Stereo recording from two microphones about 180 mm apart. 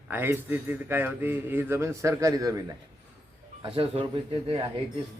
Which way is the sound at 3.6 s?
30° right (ahead or behind).